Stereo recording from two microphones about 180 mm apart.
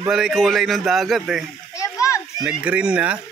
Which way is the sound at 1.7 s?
20° left (ahead or behind).